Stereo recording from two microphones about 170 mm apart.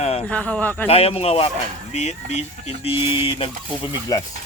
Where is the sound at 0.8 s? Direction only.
35° left (ahead or behind).